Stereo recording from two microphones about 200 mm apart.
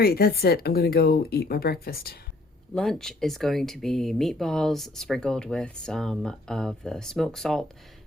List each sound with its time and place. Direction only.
0.0 s speech: 50° left (ahead or behind)
2.7 s speech: centre (ahead or behind)